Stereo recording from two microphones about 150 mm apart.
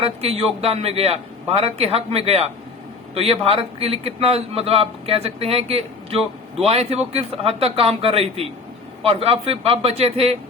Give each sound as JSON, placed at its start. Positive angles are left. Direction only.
{"t": 0.0, "sound": "a man's voice", "side_deg": -40}